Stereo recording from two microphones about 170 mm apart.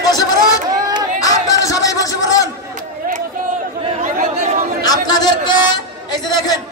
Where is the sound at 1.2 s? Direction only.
20° left (ahead or behind).